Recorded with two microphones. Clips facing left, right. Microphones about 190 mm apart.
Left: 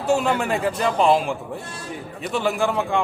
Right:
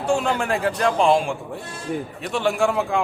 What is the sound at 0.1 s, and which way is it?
A man's voice, 5° left (ahead or behind).